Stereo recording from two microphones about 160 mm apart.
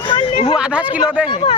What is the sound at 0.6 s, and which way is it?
Speech, 10° right (ahead or behind).